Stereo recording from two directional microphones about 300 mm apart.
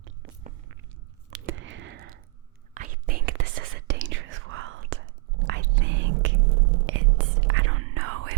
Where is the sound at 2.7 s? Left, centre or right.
Right.